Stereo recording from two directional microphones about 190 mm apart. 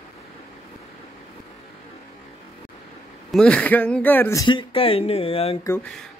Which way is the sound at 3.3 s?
5° left (ahead or behind).